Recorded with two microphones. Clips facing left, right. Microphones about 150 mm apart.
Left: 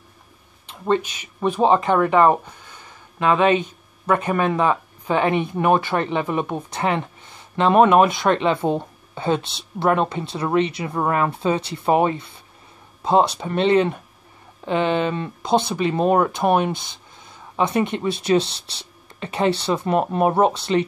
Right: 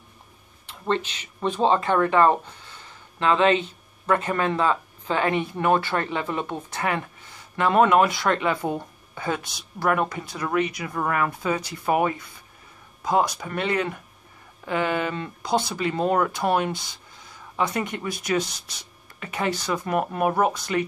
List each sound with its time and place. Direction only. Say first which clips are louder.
0.7 s speech: left 5 dB; 15° left (ahead or behind)